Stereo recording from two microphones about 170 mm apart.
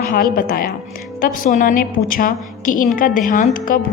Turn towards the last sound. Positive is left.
turn(degrees=55)  # may be behind; listen again after turning